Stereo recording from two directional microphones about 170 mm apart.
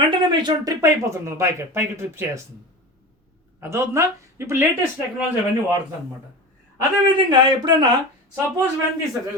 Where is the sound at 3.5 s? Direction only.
15° right (ahead or behind).